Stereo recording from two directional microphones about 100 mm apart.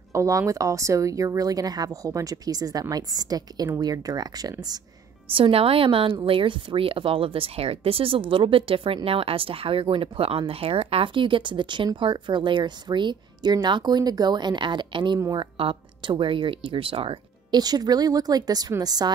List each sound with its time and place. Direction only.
0.1 s a woman's voice: 30° right (ahead or behind)
5.3 s a woman's voice: 70° right (ahead or behind); by 15.1 s 50° right (ahead or behind)
15.3 s a woman's voice: 65° right (ahead or behind)
17.5 s a woman's voice: 40° right (ahead or behind)